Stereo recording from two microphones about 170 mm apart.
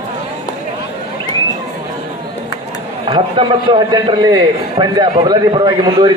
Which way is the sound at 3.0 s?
30° right (ahead or behind).